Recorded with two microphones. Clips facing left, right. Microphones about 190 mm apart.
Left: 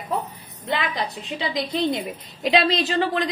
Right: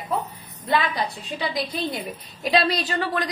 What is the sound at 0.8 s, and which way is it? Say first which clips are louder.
A woman's voice: right 2 dB; 20° left (ahead or behind).